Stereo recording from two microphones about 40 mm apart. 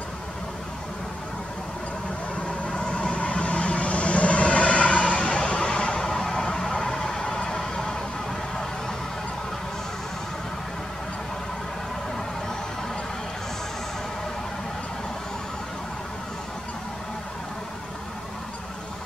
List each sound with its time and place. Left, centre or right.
2.6 s vehicle: left
7.5 s vehicle: centre